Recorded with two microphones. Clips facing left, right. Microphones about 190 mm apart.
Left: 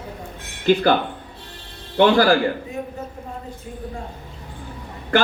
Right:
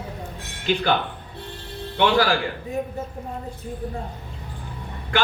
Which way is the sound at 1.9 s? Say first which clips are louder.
Left 5 dB; 40° left (ahead or behind).